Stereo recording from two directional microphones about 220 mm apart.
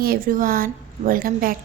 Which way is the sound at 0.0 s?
40° right (ahead or behind).